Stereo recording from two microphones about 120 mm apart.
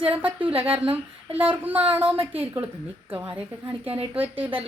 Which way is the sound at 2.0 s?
50° right (ahead or behind).